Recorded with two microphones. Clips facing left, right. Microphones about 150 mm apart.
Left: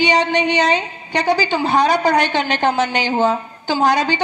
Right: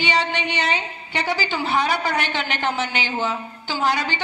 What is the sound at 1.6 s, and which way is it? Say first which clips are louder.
Speech: left 6 dB; 45° left (ahead or behind).